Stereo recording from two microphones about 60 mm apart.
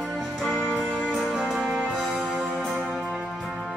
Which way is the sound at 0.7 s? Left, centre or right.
Centre.